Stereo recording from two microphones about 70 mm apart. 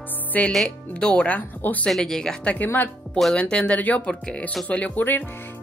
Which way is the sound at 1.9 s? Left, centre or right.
Centre.